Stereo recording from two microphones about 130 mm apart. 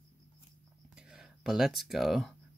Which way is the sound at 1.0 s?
5° right (ahead or behind).